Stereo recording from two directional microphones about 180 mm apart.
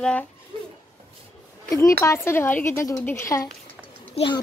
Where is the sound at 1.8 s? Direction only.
15° left (ahead or behind).